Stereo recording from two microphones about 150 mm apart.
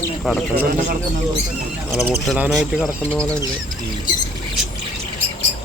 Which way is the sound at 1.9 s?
Centre (ahead or behind).